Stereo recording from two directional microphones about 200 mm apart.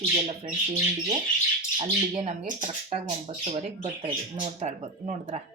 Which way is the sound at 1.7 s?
25° right (ahead or behind).